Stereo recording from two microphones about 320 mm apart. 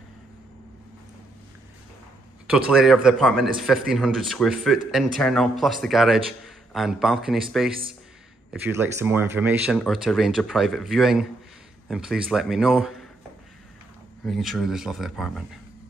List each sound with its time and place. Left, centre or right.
2.5 s speech: centre
14.2 s speech: centre